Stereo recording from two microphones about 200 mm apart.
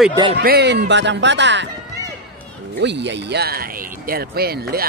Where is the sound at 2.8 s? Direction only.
60° right (ahead or behind).